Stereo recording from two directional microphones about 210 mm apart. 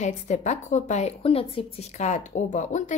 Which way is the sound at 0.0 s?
35° left (ahead or behind).